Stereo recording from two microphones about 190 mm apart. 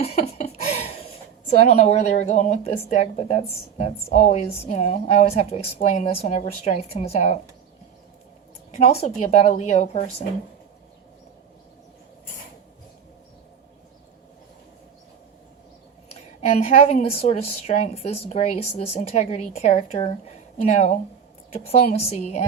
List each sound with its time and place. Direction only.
0.0 s a sound: 35° left (ahead or behind)
1.6 s speech: 35° left (ahead or behind)
8.7 s speech: 35° left (ahead or behind)
16.4 s speech: 35° left (ahead or behind)